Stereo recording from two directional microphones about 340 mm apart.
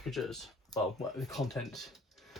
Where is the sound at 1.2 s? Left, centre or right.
Centre.